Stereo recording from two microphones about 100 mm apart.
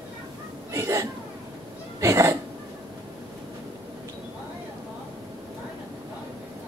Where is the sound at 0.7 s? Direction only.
35° right (ahead or behind).